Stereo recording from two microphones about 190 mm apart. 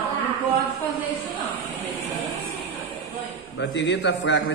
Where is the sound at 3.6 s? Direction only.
70° left (ahead or behind).